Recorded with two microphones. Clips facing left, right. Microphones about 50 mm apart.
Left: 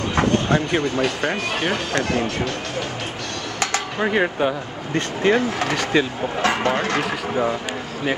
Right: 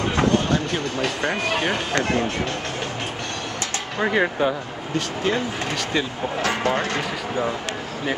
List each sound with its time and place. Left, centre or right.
0.5 s speech: left
1.0 s speech: centre
4.0 s speech: centre
4.9 s speech: left
5.9 s speech: centre
6.4 s speech: left
7.0 s speech: centre